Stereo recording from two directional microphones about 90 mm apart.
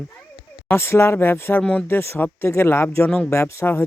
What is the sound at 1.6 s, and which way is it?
Speech, 10° left (ahead or behind).